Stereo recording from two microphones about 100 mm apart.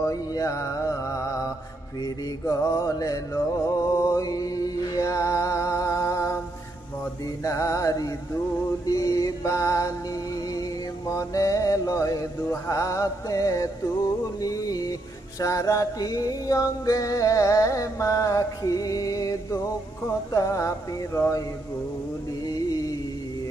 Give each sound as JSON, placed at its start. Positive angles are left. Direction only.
{"t": 0.0, "sound": "music", "side_deg": 35}
{"t": 22.5, "sound": "music", "side_deg": 40}